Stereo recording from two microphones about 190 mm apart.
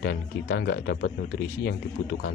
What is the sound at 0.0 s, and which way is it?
Speech, 55° left (ahead or behind).